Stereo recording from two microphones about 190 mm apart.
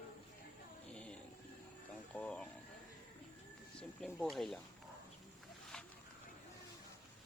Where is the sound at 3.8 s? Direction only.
5° left (ahead or behind).